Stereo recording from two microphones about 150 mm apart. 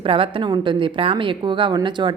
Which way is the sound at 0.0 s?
35° right (ahead or behind).